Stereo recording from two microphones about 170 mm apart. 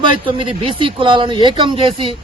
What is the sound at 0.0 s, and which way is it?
Speech, 30° right (ahead or behind).